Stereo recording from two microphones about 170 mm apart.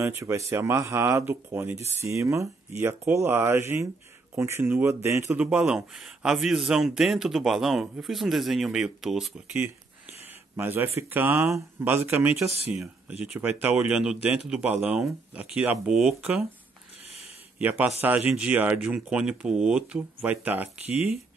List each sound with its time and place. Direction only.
0.0 s speech: 15° right (ahead or behind)
17.6 s speech: 10° right (ahead or behind)